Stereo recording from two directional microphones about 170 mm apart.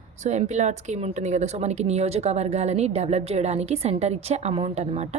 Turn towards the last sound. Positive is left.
turn(degrees=-40)  # may be behind; listen again after turning